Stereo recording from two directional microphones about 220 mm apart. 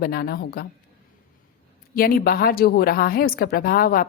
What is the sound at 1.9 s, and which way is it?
A woman's voice, 40° left (ahead or behind).